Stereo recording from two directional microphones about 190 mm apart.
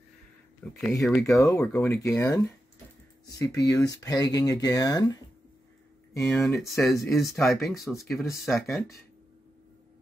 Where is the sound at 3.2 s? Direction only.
20° left (ahead or behind).